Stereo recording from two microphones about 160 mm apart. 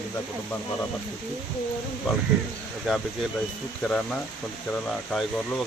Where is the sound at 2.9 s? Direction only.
Centre (ahead or behind).